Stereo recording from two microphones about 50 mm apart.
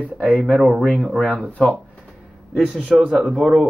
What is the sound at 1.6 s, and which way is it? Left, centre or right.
Speech, left.